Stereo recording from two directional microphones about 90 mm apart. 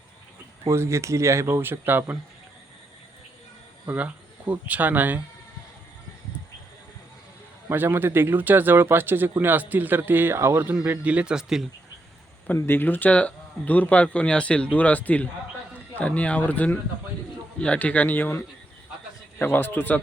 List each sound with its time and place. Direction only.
0.6 s speech: 35° right (ahead or behind)
3.8 s speech: 15° right (ahead or behind)
7.7 s speech: 25° right (ahead or behind)
11.0 s speech: 15° right (ahead or behind)
12.5 s a man's voice: 25° left (ahead or behind)